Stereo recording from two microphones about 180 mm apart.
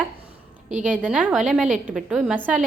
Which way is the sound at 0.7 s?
45° right (ahead or behind).